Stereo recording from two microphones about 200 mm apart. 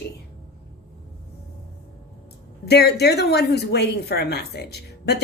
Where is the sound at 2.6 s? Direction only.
55° left (ahead or behind).